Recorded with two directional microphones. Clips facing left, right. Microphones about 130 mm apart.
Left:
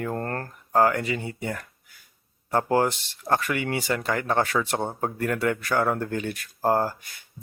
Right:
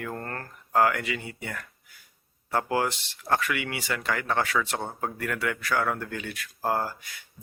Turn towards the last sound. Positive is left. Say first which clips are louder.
# left 5 dB
turn(degrees=35)  # may be behind; listen again after turning